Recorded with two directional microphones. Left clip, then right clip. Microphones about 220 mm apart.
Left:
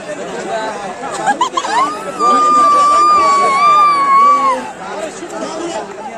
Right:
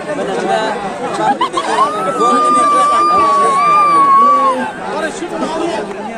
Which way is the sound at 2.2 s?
45° right (ahead or behind).